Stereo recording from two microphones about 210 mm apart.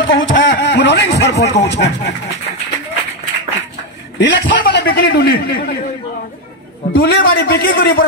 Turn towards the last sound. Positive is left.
turn(degrees=45)  # may be behind; listen again after turning